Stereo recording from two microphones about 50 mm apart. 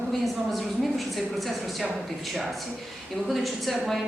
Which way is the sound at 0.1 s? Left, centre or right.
Centre.